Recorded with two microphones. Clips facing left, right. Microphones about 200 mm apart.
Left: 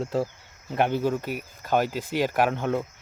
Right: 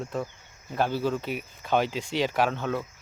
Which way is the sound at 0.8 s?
20° left (ahead or behind).